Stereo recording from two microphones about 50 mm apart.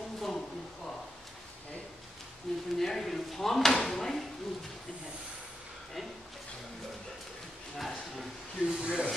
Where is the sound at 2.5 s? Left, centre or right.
Centre.